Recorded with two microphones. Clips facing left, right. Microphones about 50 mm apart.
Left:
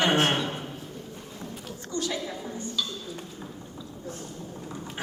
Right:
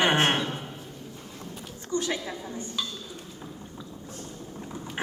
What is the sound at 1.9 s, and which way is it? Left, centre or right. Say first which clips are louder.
Speech: right 2 dB; right.